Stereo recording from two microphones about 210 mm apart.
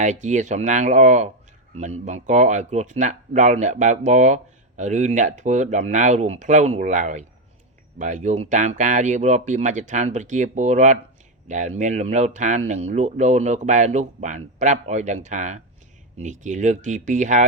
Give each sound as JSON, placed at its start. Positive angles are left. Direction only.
{"t": 0.0, "sound": "speech", "side_deg": -35}